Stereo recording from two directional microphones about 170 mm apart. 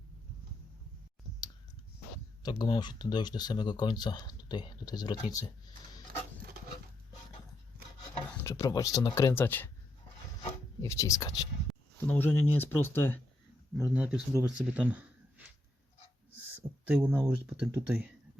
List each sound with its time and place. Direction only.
2.4 s speech: 25° left (ahead or behind)
8.4 s speech: 20° left (ahead or behind)
10.8 s speech: 20° left (ahead or behind)
11.7 s speech: 10° left (ahead or behind)
13.7 s speech: 10° right (ahead or behind)
16.8 s speech: 10° right (ahead or behind)